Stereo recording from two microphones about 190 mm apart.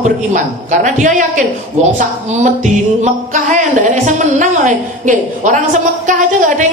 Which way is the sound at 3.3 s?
40° right (ahead or behind).